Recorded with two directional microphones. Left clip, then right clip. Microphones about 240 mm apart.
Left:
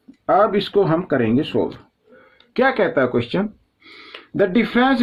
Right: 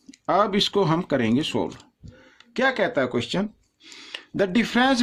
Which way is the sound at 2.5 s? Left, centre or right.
Centre.